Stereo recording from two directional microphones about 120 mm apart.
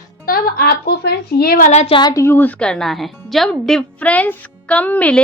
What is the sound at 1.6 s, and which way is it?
Speech, 70° left (ahead or behind).